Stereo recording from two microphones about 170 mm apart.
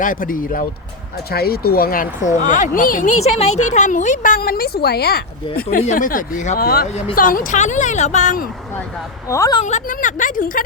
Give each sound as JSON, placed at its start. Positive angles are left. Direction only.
{"t": 0.0, "sound": "speech", "side_deg": 55}
{"t": 3.2, "sound": "speech", "side_deg": 40}
{"t": 5.7, "sound": "speech", "side_deg": 50}
{"t": 6.6, "sound": "speech", "side_deg": 65}
{"t": 9.3, "sound": "a woman's voice", "side_deg": 20}
{"t": 9.6, "sound": "speech", "side_deg": 45}